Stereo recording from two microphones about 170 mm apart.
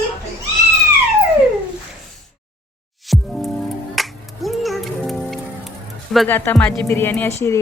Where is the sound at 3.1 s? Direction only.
Centre (ahead or behind).